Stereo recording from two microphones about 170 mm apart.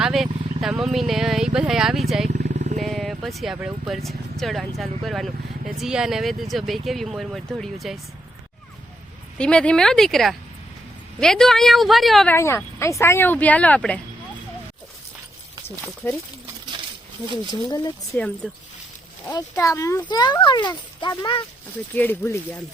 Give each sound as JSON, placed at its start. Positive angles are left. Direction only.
{"t": 0.0, "sound": "vehicle", "side_deg": 0}
{"t": 1.5, "sound": "speech", "side_deg": -5}
{"t": 2.5, "sound": "wild animals", "side_deg": -45}
{"t": 2.8, "sound": "speech", "side_deg": 0}
{"t": 9.4, "sound": "speech", "side_deg": 5}
{"t": 12.3, "sound": "speech", "side_deg": 15}
{"t": 16.0, "sound": "speech", "side_deg": 10}
{"t": 17.5, "sound": "speech", "side_deg": 25}
{"t": 18.4, "sound": "speech", "side_deg": 5}
{"t": 19.3, "sound": "speech", "side_deg": 20}
{"t": 21.9, "sound": "speech", "side_deg": 15}